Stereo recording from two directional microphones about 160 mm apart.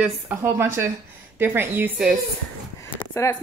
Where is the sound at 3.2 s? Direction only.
20° left (ahead or behind).